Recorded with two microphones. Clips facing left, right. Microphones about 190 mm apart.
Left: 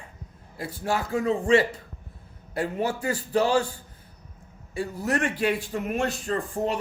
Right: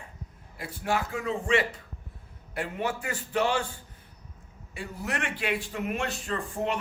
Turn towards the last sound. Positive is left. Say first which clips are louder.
# left 3 dB
turn(degrees=40)  # may be behind; listen again after turning